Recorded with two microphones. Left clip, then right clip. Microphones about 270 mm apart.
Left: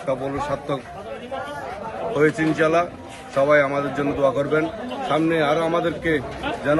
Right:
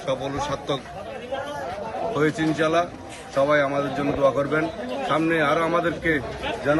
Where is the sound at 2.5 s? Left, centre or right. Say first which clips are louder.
Left 2 dB; centre.